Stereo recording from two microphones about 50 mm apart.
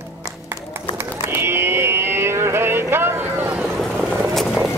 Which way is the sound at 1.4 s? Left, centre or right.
Right.